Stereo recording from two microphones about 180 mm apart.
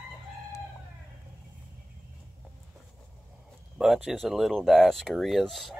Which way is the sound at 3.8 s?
5° right (ahead or behind).